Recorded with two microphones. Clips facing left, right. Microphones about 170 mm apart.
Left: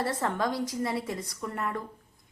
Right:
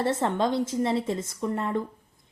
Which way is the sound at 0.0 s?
25° right (ahead or behind).